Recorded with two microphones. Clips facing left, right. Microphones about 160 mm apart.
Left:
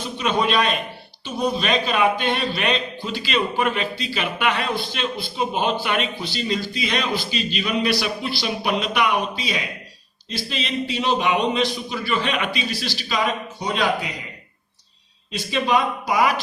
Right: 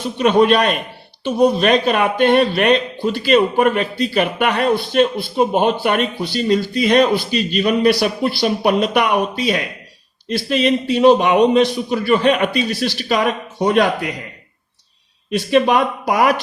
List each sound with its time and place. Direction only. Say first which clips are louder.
0.2 s a man's voice: right 8 dB; 50° right (ahead or behind)
15.3 s speech: right 7 dB; 55° right (ahead or behind)